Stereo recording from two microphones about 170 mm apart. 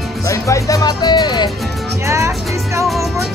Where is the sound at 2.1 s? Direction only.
15° right (ahead or behind).